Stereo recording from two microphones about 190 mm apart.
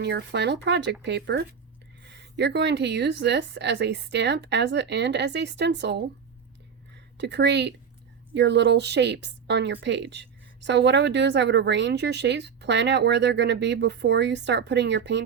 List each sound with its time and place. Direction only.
0.0 s speech: 60° right (ahead or behind)